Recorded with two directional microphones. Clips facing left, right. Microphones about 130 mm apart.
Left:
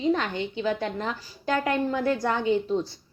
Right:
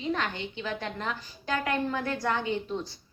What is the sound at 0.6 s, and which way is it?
A woman's voice, 20° left (ahead or behind).